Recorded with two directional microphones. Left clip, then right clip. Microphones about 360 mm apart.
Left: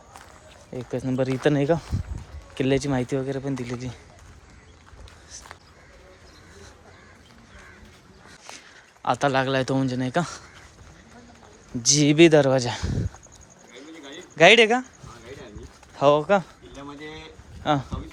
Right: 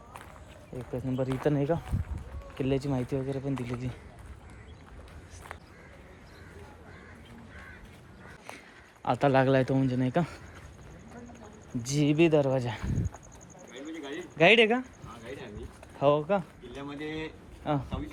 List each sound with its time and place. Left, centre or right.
0.9 s speech: left
5.3 s a sound: centre
8.4 s speech: centre
11.9 s speech: centre
14.1 s a sound: centre
16.0 s speech: centre
17.6 s speech: centre